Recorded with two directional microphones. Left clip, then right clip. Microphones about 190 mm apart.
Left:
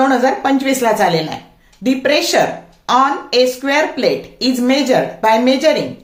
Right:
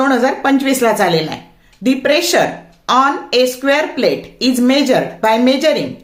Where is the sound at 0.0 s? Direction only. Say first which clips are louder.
Even; 20° right (ahead or behind).